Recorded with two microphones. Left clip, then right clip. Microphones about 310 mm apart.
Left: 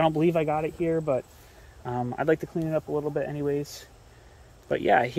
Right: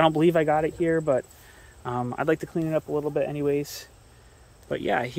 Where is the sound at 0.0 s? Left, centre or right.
Centre.